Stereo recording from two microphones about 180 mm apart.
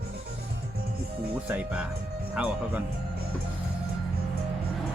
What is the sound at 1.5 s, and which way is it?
Speech, 10° right (ahead or behind).